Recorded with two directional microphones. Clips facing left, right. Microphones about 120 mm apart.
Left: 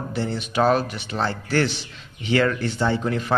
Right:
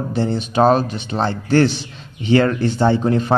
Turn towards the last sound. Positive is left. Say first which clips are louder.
# right 7 dB
turn(degrees=-30)  # may be behind; listen again after turning